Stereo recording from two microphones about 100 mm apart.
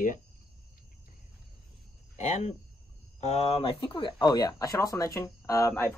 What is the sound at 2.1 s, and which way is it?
Speech, 90° left.